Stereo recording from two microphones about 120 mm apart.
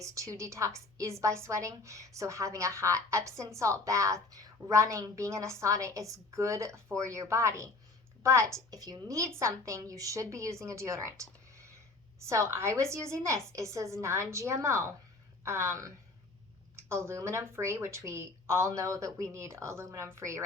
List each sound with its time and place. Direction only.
0.0 s a woman's voice: 25° right (ahead or behind)